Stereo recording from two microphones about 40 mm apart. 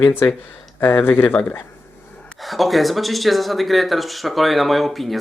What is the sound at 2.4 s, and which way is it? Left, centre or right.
Speech, centre.